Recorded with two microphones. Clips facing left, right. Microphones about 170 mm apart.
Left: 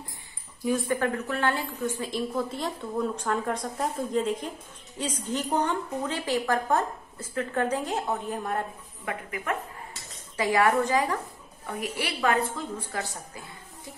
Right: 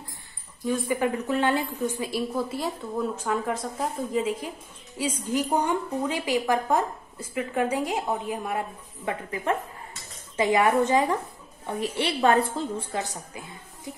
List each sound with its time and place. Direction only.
0.8 s a woman's voice: 15° right (ahead or behind)
9.0 s a woman's voice: 30° right (ahead or behind)